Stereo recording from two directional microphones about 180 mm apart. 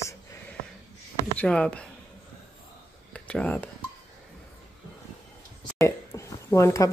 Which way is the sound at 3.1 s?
5° left (ahead or behind).